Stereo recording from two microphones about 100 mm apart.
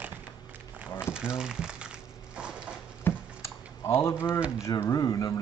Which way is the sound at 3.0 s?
25° left (ahead or behind).